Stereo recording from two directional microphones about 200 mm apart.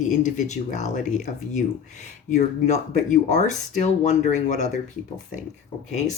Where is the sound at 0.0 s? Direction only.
35° left (ahead or behind).